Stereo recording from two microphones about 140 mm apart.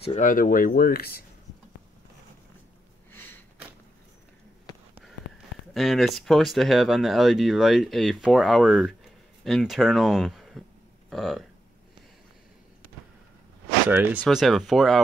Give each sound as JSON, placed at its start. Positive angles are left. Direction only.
{"t": 0.2, "sound": "speech", "side_deg": 75}
{"t": 3.1, "sound": "sniff", "side_deg": 15}
{"t": 4.7, "sound": "a sound", "side_deg": 25}
{"t": 5.7, "sound": "speech", "side_deg": 0}
{"t": 13.8, "sound": "speech", "side_deg": -10}
{"t": 14.2, "sound": "speech", "side_deg": 0}